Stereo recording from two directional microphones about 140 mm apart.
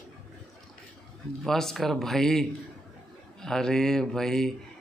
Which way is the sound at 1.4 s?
5° left (ahead or behind).